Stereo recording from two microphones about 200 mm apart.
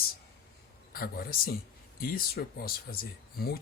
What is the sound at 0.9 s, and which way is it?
Speech, 50° left (ahead or behind).